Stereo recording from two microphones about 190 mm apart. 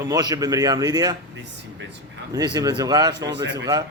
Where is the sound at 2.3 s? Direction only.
20° right (ahead or behind).